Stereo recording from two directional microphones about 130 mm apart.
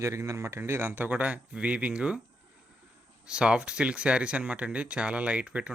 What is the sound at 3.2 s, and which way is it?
Speech, 5° right (ahead or behind).